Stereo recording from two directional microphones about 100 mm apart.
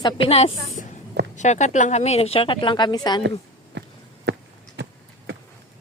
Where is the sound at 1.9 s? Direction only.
90° left; by 3.2 s 45° left (ahead or behind).